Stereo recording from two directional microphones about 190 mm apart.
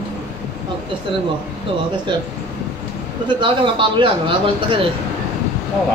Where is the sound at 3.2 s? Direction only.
25° right (ahead or behind).